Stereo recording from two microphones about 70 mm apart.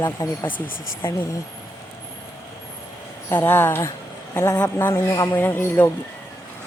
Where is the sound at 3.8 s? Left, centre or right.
Left.